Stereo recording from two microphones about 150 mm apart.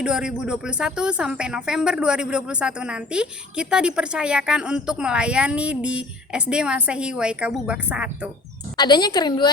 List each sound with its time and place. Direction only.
0.0 s speech: 5° right (ahead or behind)
8.7 s a woman's voice: 30° left (ahead or behind)